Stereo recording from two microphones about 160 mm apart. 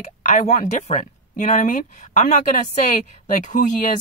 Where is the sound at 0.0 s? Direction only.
55° left (ahead or behind).